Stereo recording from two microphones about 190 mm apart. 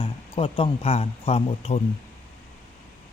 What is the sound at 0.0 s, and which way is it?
Speech, 30° left (ahead or behind).